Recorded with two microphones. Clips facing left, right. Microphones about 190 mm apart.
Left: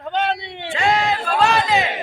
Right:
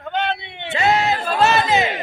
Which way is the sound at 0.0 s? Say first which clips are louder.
Left 2 dB; 35° left (ahead or behind).